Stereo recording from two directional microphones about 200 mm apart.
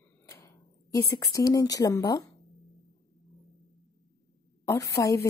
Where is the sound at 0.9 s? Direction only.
15° left (ahead or behind).